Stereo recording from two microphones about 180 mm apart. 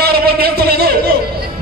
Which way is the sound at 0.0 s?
60° right (ahead or behind).